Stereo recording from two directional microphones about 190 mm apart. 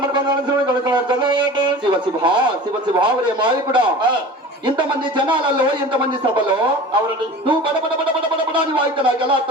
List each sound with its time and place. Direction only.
0.1 s a sound: 25° right (ahead or behind)
2.9 s a man's voice: 25° right (ahead or behind)
8.5 s a man's voice: 25° right (ahead or behind)